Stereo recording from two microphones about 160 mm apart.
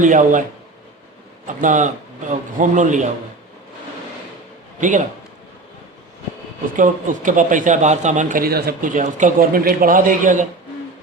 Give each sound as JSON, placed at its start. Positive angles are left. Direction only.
{"t": 0.0, "sound": "a man's voice", "side_deg": -55}
{"t": 1.5, "sound": "a man's voice", "side_deg": -50}
{"t": 4.8, "sound": "a man's voice", "side_deg": -50}
{"t": 6.7, "sound": "a man's voice", "side_deg": -55}